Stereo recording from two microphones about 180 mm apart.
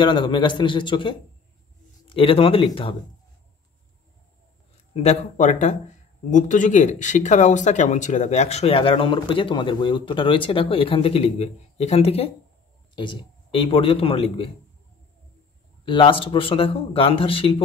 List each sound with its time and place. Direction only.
0.0 s a man's voice: 25° left (ahead or behind)
4.9 s speech: 40° left (ahead or behind)
15.8 s speech: 30° left (ahead or behind)